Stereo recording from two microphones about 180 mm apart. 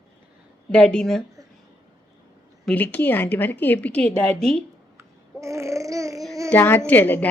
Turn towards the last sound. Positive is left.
turn(degrees=10)  # may be behind; listen again after turning